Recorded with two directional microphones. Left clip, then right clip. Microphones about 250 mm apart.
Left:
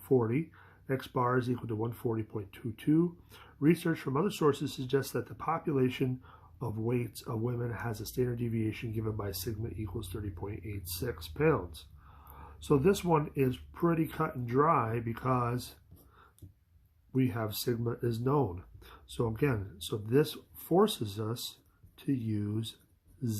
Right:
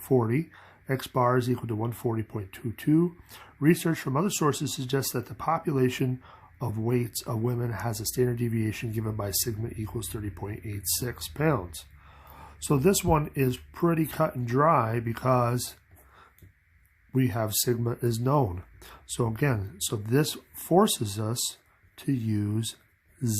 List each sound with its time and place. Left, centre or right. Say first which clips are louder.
0.2 s speech: right 4 dB; right
17.1 s speech: right 5 dB; right